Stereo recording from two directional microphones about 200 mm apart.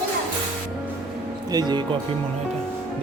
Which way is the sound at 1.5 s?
20° right (ahead or behind).